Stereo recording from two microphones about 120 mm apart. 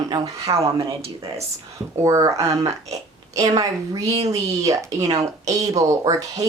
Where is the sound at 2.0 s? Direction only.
30° right (ahead or behind).